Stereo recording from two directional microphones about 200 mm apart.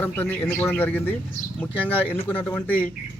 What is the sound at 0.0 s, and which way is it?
Speech, 10° left (ahead or behind).